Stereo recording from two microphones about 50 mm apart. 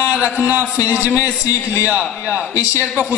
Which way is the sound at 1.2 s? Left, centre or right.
Left.